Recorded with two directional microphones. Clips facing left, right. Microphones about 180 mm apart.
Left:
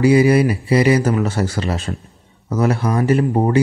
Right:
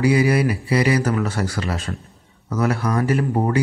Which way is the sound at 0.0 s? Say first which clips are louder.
Left 5 dB; 25° left (ahead or behind).